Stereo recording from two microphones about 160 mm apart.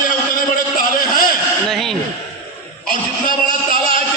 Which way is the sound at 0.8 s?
60° left (ahead or behind).